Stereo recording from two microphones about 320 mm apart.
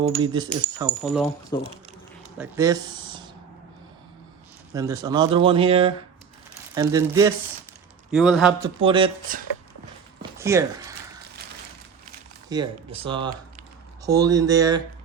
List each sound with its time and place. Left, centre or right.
0.0 s speech: centre
1.0 s a man's voice: centre
1.5 s speech: centre
2.4 s speech: centre
4.7 s speech: centre
6.9 s a man's voice: centre
8.8 s speech: centre
10.3 s zipper: centre
12.5 s speech: centre